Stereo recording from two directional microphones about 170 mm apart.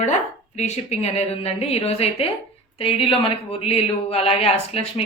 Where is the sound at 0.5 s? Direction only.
40° left (ahead or behind).